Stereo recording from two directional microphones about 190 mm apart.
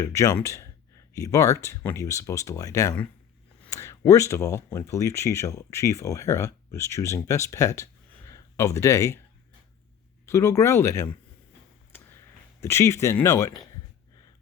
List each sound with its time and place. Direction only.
0.0 s speech: 15° left (ahead or behind)
10.2 s speech: 15° left (ahead or behind)
12.5 s speech: 15° left (ahead or behind)